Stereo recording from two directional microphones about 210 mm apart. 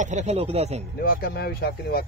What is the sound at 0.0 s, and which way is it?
Speech, 35° right (ahead or behind).